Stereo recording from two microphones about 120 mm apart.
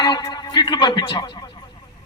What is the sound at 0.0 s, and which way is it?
Speech, 35° left (ahead or behind).